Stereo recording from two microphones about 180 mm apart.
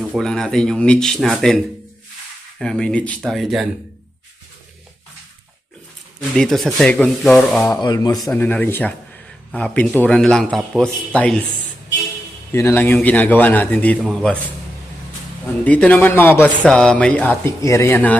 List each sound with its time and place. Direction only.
0.0 s a man's voice: centre (ahead or behind)
6.3 s a man's voice: centre (ahead or behind)
7.8 s speech: 20° left (ahead or behind)
8.1 s a man's voice: centre (ahead or behind)
12.5 s a man's voice: 15° left (ahead or behind)
15.6 s speech: 10° left (ahead or behind)